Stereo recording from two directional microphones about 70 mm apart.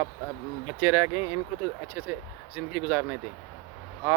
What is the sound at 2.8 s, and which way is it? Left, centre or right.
Speech, right.